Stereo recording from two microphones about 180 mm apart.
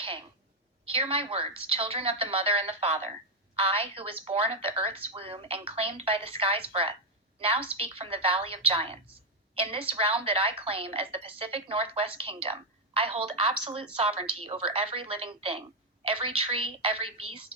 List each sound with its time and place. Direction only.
0.9 s a woman's voice: 30° right (ahead or behind)